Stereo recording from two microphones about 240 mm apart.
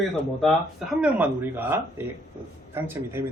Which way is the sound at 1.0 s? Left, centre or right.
Centre.